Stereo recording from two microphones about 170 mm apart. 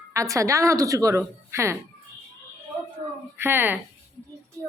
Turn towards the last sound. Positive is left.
turn(degrees=15)  # may be behind; listen again after turning